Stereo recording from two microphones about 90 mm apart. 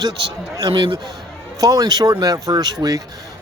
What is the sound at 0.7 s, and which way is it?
Speech, 65° right (ahead or behind).